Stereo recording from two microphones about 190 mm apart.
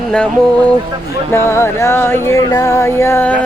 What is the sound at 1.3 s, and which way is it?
Music, 15° left (ahead or behind).